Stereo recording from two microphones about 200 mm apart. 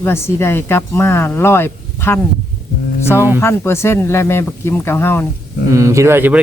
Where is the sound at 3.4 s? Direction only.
10° left (ahead or behind).